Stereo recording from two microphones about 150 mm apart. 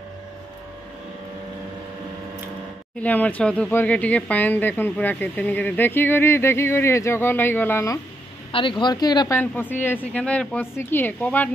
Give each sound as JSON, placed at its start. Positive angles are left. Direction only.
{"t": 3.0, "sound": "speech", "side_deg": 10}
{"t": 8.5, "sound": "speech", "side_deg": 35}
{"t": 9.4, "sound": "speech", "side_deg": 15}